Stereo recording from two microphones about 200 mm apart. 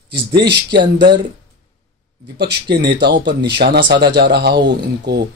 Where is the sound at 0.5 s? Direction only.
25° right (ahead or behind).